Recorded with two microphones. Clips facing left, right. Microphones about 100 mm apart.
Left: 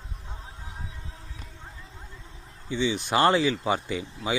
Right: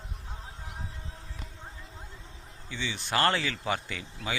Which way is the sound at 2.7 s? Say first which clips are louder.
Left 7 dB; 15° left (ahead or behind).